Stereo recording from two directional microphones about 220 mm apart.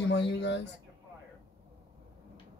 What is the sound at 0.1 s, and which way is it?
Speech, 50° left (ahead or behind).